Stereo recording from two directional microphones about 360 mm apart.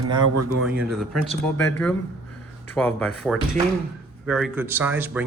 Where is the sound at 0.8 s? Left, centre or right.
Centre.